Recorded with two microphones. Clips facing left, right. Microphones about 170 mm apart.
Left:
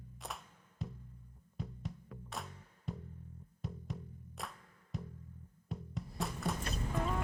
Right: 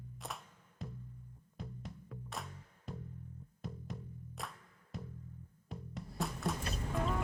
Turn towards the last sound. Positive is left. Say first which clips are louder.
# even
turn(degrees=0)  # may be behind; listen again after turning